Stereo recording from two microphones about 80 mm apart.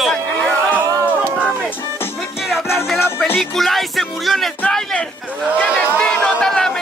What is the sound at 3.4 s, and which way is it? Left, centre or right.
Music, centre.